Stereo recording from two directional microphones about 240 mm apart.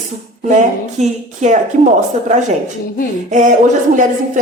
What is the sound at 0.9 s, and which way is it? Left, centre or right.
Speech, right.